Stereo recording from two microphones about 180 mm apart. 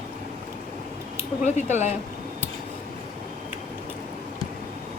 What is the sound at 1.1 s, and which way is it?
Speech, 40° left (ahead or behind).